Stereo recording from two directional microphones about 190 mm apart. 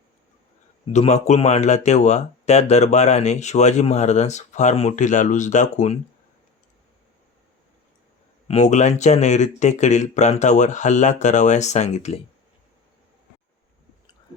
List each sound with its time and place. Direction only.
0.9 s speech: 35° left (ahead or behind)
8.4 s speech: 35° left (ahead or behind)